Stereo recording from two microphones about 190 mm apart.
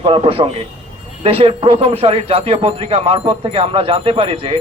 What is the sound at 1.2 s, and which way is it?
A man's voice, 30° right (ahead or behind).